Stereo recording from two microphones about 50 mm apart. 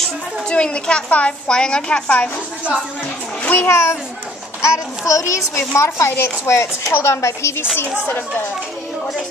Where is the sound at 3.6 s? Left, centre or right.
Left.